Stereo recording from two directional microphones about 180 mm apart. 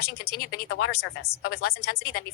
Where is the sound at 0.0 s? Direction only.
60° left (ahead or behind).